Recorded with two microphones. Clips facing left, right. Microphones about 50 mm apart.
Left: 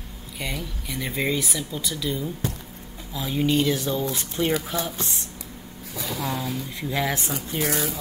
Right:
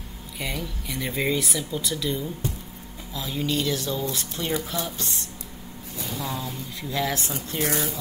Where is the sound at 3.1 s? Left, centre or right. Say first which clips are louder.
Left 4 dB; centre.